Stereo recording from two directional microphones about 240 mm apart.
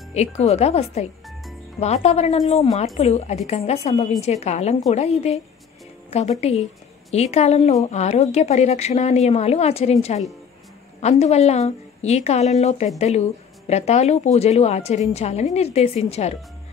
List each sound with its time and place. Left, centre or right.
0.1 s speech: left
6.0 s music: left
7.1 s speech: left